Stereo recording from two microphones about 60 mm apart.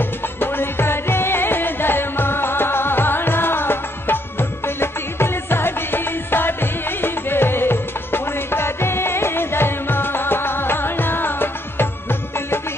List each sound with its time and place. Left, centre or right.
0.0 s music: left